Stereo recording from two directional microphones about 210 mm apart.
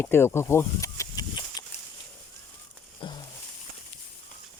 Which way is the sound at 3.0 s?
25° left (ahead or behind).